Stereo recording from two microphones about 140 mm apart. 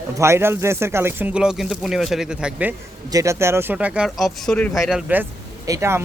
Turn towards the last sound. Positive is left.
turn(degrees=-20)  # may be behind; listen again after turning